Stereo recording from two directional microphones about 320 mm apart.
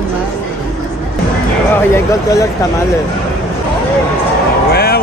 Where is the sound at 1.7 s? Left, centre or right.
Centre.